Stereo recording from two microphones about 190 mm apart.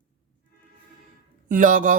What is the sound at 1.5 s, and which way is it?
Speech, 45° right (ahead or behind).